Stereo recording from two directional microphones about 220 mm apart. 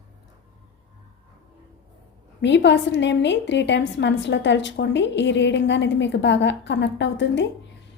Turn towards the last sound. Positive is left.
turn(degrees=55)  # may be behind; listen again after turning